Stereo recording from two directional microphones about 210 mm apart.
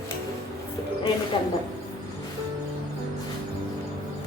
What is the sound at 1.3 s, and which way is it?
Speech, 25° left (ahead or behind).